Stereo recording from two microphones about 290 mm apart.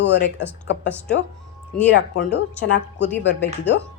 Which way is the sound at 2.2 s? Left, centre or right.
Left.